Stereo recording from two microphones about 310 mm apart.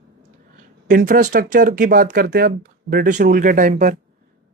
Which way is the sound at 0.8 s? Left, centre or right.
Right.